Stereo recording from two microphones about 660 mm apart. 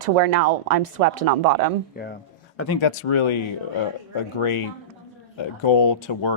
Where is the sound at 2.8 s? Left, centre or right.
Left.